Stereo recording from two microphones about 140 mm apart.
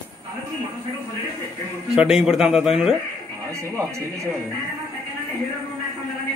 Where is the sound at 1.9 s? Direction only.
5° right (ahead or behind).